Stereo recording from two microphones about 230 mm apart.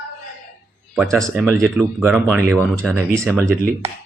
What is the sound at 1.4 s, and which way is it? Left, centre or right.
Speech, centre.